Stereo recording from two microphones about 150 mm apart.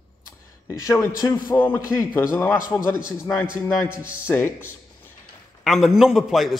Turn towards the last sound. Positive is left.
turn(degrees=0)  # may be behind; listen again after turning